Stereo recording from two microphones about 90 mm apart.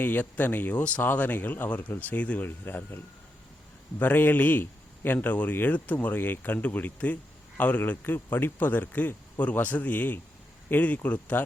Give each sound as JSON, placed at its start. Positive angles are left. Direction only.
{"t": 0.0, "sound": "speech", "side_deg": 20}